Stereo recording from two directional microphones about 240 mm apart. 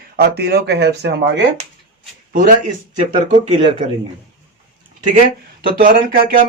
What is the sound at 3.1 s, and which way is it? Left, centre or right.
Speech, right.